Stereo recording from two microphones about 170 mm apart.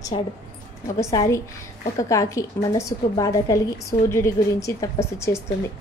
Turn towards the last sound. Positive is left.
turn(degrees=15)  # may be behind; listen again after turning